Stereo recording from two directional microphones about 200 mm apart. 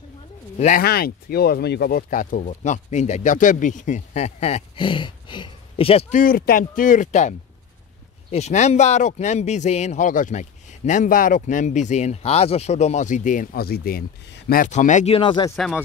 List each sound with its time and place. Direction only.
0.6 s speech: 40° left (ahead or behind); by 15.5 s 25° left (ahead or behind)
15.5 s speech: centre (ahead or behind)